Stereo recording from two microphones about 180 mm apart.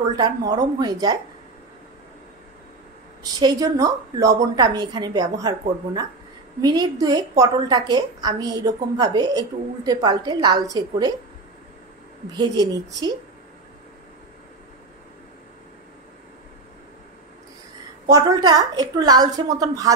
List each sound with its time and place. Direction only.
0.1 s a woman's voice: 20° right (ahead or behind)
3.3 s a woman's voice: 20° right (ahead or behind)
12.4 s a woman's voice: 20° right (ahead or behind)
18.0 s a woman's voice: 20° right (ahead or behind)